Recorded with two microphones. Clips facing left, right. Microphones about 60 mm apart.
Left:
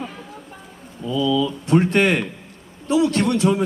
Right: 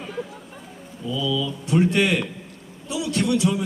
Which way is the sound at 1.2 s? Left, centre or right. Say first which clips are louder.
Left 6 dB; left.